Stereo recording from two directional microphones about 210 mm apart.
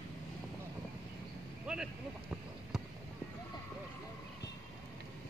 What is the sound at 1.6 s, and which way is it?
Vehicle, 5° right (ahead or behind).